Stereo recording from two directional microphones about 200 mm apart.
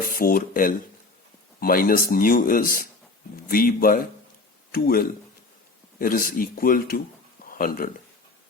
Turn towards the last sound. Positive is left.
turn(degrees=45)  # may be behind; listen again after turning